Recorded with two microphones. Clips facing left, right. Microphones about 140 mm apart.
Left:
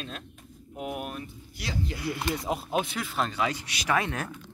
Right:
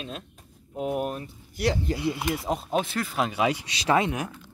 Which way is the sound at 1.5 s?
65° right (ahead or behind).